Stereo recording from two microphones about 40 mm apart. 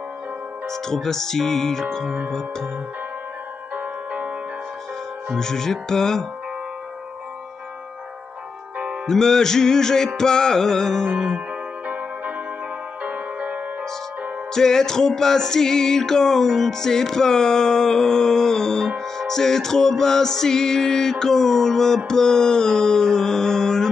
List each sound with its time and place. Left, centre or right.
0.7 s music: centre
3.7 s music: right
5.3 s music: centre
9.0 s music: centre
13.0 s music: right
14.5 s music: centre